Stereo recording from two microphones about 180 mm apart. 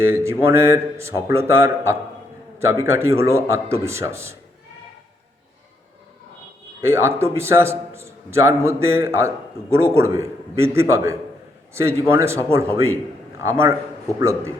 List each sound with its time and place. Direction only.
0.0 s a man's voice: 15° right (ahead or behind)
6.8 s a man's voice: 15° right (ahead or behind)